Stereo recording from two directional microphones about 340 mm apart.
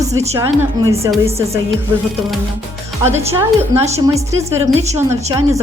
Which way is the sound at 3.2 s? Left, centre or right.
Centre.